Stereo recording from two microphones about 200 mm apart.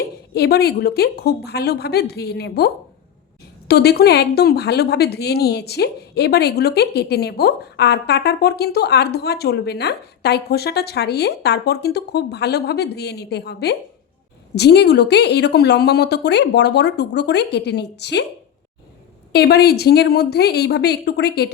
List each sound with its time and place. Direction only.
0.3 s a woman's voice: 50° left (ahead or behind)
19.3 s a woman's voice: 55° left (ahead or behind)